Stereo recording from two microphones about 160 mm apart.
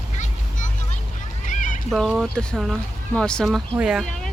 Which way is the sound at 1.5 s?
55° left (ahead or behind).